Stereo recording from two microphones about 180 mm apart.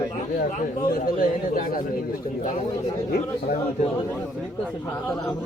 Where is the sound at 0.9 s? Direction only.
50° left (ahead or behind).